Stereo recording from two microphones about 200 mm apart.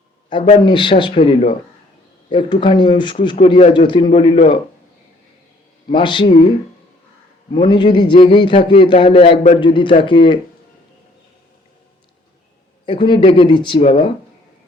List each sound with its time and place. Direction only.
0.4 s a man's voice: 25° left (ahead or behind)
5.9 s a man's voice: 25° left (ahead or behind)
7.5 s a man's voice: 25° left (ahead or behind)
12.8 s a man's voice: 25° left (ahead or behind)